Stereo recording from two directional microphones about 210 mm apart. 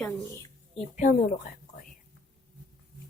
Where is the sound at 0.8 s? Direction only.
40° left (ahead or behind).